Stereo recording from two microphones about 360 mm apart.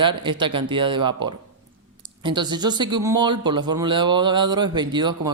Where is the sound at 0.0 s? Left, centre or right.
Centre.